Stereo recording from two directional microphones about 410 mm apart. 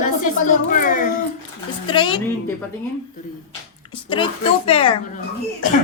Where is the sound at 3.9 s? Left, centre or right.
Centre.